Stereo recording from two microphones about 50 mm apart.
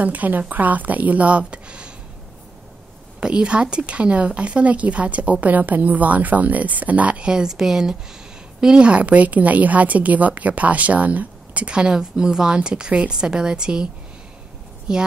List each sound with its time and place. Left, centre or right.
0.0 s a woman's voice: right
3.2 s a woman's voice: centre
14.9 s a woman's voice: centre